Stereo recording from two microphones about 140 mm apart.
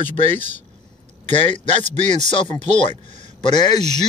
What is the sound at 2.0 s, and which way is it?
Speech, 55° right (ahead or behind).